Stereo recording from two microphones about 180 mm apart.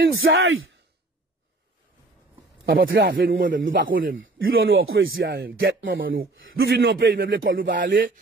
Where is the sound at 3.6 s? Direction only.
90° right; by 7.5 s 55° right (ahead or behind).